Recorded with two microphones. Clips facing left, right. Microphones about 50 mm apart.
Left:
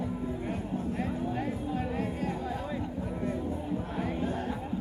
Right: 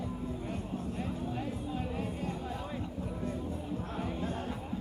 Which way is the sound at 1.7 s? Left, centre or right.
Left.